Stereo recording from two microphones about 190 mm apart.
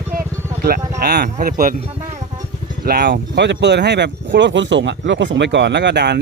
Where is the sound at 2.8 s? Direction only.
55° right (ahead or behind).